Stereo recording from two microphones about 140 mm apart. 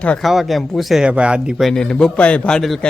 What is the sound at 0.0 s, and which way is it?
Speech, 5° left (ahead or behind).